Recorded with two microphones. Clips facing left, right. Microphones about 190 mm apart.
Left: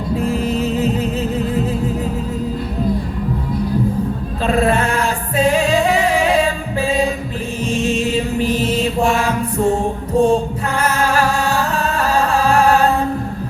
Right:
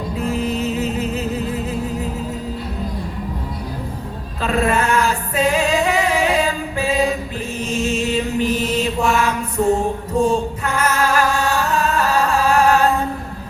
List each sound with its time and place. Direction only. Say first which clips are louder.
4.4 s music: left 2 dB; 35° left (ahead or behind)
7.8 s music: left 2 dB; centre (ahead or behind)
8.1 s music: left 1 dB; 35° left (ahead or behind)